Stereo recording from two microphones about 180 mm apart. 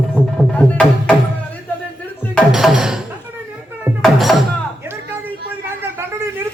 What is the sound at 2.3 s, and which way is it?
Music, centre (ahead or behind).